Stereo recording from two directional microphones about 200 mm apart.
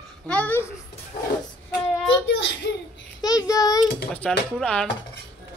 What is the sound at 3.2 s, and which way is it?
Child singing, 20° left (ahead or behind).